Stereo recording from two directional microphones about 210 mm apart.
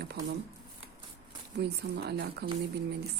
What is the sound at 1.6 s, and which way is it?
Speech, 50° right (ahead or behind).